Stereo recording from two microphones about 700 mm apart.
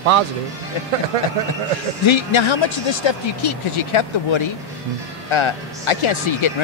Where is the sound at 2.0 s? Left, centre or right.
Left.